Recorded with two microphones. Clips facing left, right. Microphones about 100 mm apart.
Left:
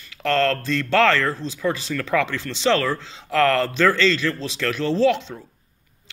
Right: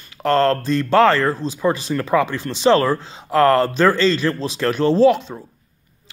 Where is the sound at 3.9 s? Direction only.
15° right (ahead or behind).